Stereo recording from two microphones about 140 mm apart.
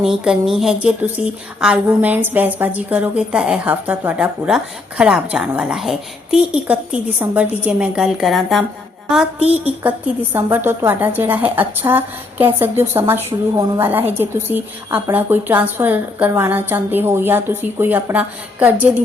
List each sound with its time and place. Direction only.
0.0 s a woman's voice: 5° right (ahead or behind)
10.3 s a woman's voice: 15° right (ahead or behind)